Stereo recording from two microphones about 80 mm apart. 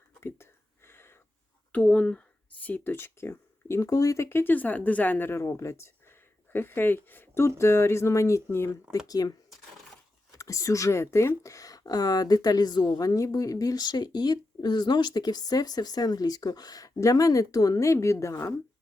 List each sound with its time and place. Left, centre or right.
0.2 s speech: left
0.9 s a sound: left
1.7 s speech: centre; by 4.3 s left
4.3 s a woman's voice: left
9.0 s speech: left
10.3 s speech: left
13.1 s speech: left